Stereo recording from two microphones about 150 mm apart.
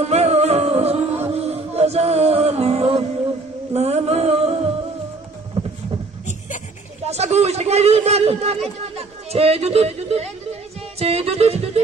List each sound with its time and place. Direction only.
0.0 s music: 45° right (ahead or behind)
3.7 s a sound: 45° right (ahead or behind)
7.1 s a man's voice: 45° right (ahead or behind)